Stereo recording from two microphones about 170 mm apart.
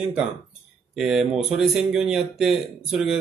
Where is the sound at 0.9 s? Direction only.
5° right (ahead or behind).